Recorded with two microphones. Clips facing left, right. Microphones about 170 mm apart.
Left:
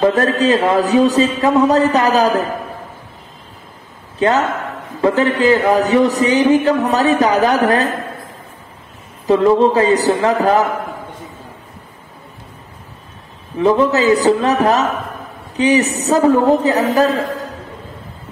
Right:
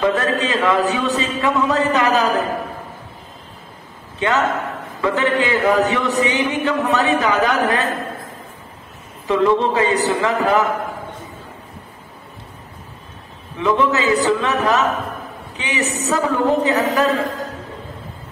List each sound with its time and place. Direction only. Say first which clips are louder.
0.0 s speech: left 5 dB; 35° left (ahead or behind)
4.2 s speech: left 3 dB; 35° left (ahead or behind)
9.3 s speech: left 5 dB; 35° left (ahead or behind)
13.6 s speech: left 5 dB; 35° left (ahead or behind)